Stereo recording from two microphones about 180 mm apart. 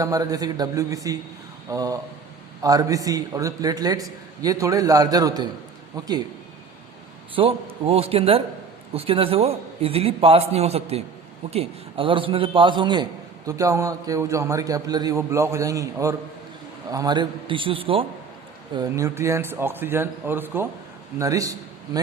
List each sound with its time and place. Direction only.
0.0 s a man's voice: 20° right (ahead or behind)
7.3 s a man's voice: 30° right (ahead or behind)
18.7 s a man's voice: 20° right (ahead or behind)